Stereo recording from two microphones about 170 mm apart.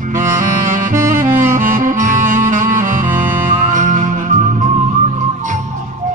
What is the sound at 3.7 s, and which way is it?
Music, 50° right (ahead or behind).